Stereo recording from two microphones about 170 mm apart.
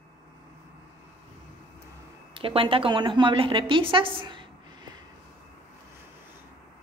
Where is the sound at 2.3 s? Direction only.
30° right (ahead or behind).